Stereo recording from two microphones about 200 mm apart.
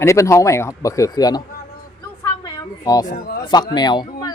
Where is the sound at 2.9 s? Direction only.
20° left (ahead or behind).